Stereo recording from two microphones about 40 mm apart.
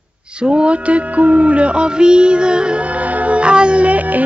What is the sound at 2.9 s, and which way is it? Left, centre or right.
Music, right.